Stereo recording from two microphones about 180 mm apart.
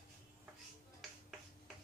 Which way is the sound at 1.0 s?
Centre (ahead or behind).